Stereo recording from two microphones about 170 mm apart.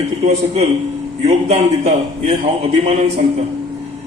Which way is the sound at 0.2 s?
40° right (ahead or behind).